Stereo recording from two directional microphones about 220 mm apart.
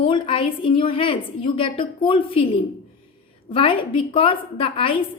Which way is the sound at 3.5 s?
25° left (ahead or behind).